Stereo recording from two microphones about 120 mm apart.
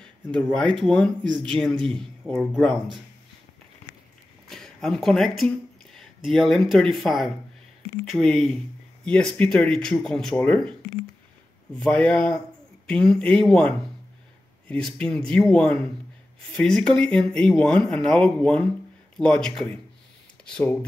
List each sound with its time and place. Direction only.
0.0 s speech: 5° left (ahead or behind)
4.5 s speech: 5° left (ahead or behind)
11.8 s speech: 10° left (ahead or behind)